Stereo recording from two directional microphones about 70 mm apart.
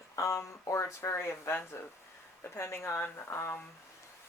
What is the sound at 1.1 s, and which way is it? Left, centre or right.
Speech, left.